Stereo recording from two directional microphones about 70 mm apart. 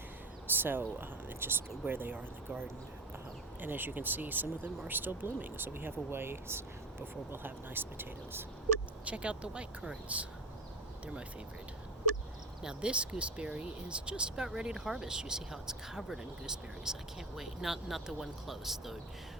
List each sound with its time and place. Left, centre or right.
0.5 s speech: right
9.0 s speech: centre
12.6 s speech: centre